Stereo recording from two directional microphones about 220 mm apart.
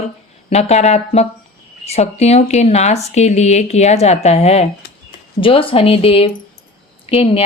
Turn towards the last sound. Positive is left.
turn(degrees=25)  # may be behind; listen again after turning